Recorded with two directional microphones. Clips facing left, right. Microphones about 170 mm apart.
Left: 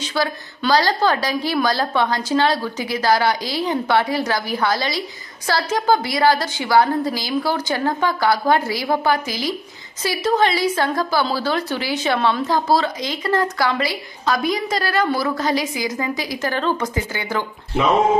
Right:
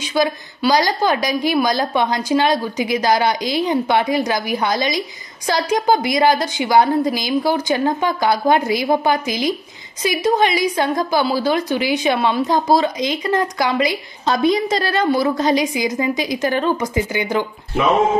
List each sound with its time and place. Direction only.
0.0 s a woman's voice: 15° right (ahead or behind)